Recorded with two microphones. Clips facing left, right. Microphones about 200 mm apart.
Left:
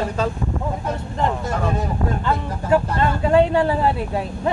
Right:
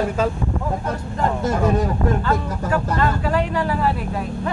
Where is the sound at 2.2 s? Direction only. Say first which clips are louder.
Left 1 dB; 25° left (ahead or behind).